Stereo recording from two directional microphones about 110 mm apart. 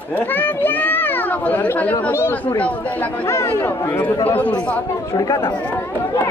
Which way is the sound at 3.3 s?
25° left (ahead or behind).